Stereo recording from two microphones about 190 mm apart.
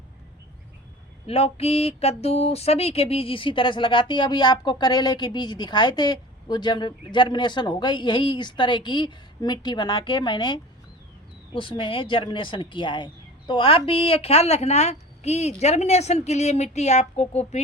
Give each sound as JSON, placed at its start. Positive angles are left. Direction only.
{"t": 1.3, "sound": "mantra", "side_deg": 30}
{"t": 13.5, "sound": "a woman's voice", "side_deg": 25}